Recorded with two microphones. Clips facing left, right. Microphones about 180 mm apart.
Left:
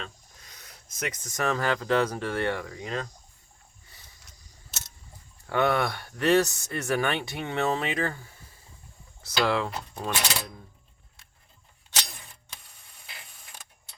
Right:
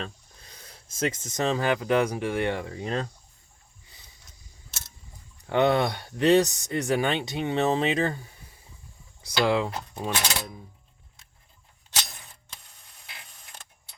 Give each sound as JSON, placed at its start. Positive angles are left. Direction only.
{"t": 0.0, "sound": "speech", "side_deg": -30}
{"t": 2.8, "sound": "speech", "side_deg": -30}
{"t": 5.5, "sound": "speech", "side_deg": -20}